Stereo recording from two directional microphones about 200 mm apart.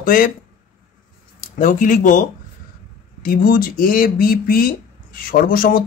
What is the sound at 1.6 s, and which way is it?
Speech, 40° left (ahead or behind).